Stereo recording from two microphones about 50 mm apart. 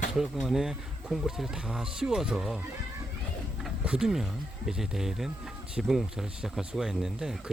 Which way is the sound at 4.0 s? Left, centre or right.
Centre.